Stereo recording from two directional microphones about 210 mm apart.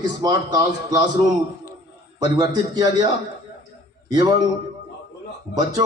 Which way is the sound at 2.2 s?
20° right (ahead or behind).